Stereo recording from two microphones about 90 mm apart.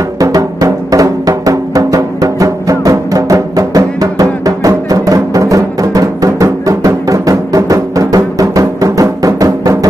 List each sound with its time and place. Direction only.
0.2 s music: 40° right (ahead or behind)